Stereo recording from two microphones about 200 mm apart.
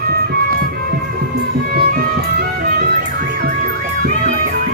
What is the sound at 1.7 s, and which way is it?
Music, 45° right (ahead or behind).